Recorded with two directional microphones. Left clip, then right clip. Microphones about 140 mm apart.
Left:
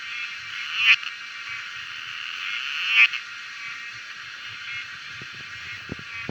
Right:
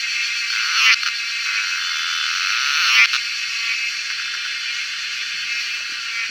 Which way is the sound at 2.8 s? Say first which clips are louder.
Right 3 dB; 25° right (ahead or behind).